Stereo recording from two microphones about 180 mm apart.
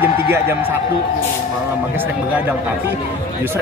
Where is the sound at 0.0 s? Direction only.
15° right (ahead or behind).